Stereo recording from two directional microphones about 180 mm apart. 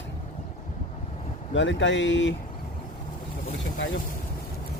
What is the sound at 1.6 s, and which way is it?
Speech, 90° left.